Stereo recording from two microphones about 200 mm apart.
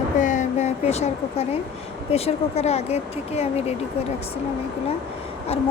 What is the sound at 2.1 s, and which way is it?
Speech, 30° left (ahead or behind).